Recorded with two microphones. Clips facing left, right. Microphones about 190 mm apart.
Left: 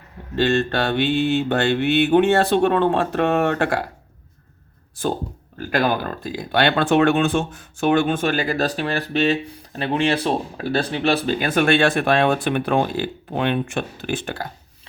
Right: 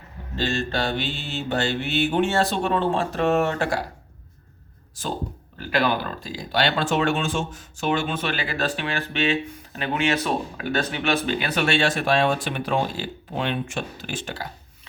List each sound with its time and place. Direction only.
0.3 s mantra: 60° left (ahead or behind)
5.0 s mantra: 55° left (ahead or behind)
5.5 s speech: 45° left (ahead or behind)